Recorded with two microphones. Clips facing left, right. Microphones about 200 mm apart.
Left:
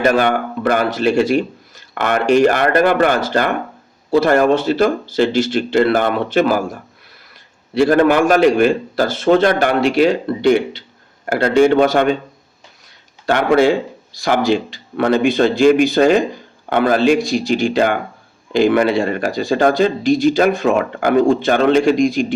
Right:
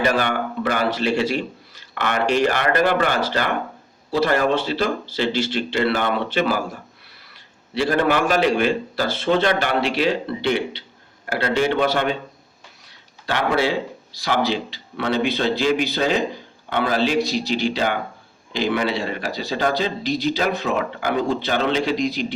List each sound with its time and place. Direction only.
0.0 s speech: 45° left (ahead or behind)
13.2 s speech: 50° left (ahead or behind)